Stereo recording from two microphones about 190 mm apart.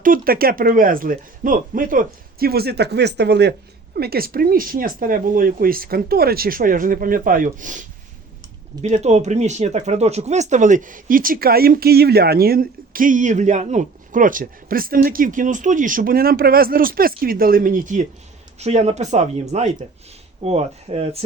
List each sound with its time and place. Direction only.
0.0 s speech: 50° right (ahead or behind); by 21.2 s 35° right (ahead or behind)